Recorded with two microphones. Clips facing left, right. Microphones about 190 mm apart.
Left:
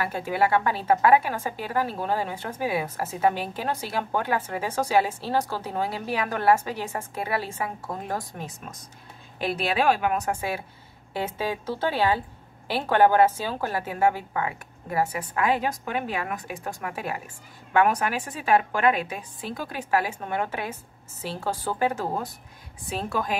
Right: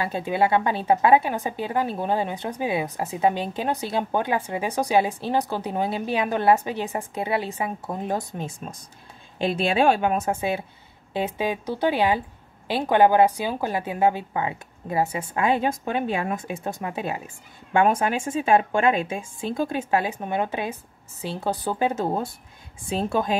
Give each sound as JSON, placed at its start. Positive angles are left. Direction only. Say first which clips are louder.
{"t": 0.0, "sound": "a woman's voice", "louder": "right 2 dB", "side_deg": -20}